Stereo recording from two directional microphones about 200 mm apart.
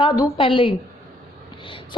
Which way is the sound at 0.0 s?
20° left (ahead or behind).